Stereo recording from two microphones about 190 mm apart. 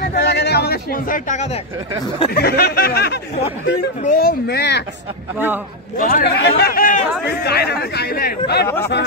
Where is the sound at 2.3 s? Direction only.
55° left (ahead or behind).